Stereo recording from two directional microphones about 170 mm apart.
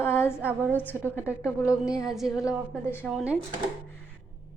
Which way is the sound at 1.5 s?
15° left (ahead or behind).